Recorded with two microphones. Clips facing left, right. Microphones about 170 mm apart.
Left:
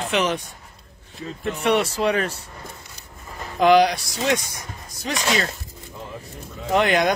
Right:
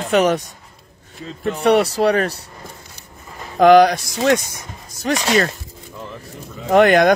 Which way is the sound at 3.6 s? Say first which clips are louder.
Right 5 dB; 50° right (ahead or behind).